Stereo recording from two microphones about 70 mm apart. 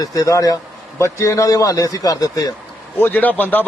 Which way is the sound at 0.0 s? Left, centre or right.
Left.